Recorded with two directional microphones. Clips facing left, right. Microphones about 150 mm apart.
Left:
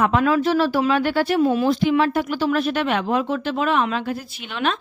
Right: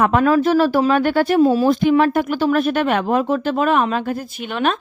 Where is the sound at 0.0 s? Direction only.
50° right (ahead or behind).